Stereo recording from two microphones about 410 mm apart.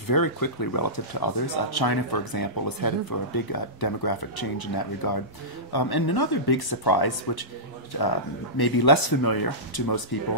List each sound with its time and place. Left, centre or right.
0.1 s speech: left
8.5 s speech: left